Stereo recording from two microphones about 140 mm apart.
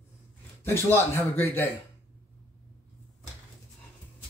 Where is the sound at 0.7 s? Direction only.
15° left (ahead or behind).